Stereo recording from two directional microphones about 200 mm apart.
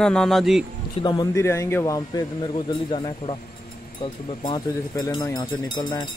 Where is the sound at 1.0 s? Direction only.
20° left (ahead or behind).